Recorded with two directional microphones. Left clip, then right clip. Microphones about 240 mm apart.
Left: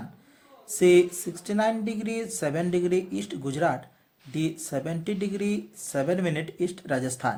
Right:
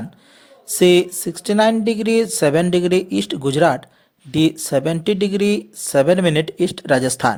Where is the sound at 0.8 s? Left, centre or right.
Right.